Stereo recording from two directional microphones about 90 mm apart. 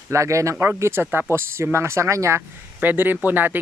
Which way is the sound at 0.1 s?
35° right (ahead or behind).